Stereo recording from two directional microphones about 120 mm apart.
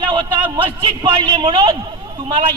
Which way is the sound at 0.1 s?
35° right (ahead or behind).